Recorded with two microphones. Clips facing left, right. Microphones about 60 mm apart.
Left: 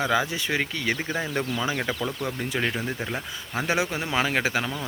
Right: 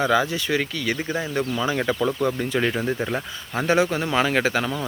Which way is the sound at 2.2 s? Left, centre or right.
Centre.